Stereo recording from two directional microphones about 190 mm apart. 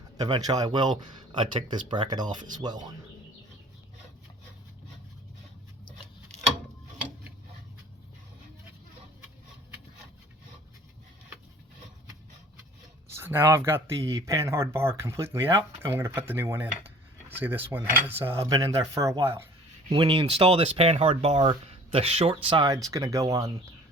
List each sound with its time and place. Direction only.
0.2 s speech: 20° right (ahead or behind)
13.1 s speech: 15° right (ahead or behind)
19.9 s speech: 25° right (ahead or behind)